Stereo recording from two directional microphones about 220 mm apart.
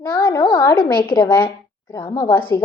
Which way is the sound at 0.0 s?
20° left (ahead or behind).